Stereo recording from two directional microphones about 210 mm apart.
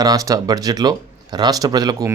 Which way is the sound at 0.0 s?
15° right (ahead or behind).